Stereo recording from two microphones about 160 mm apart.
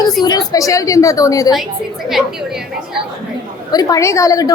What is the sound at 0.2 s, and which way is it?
A woman's voice, 25° left (ahead or behind).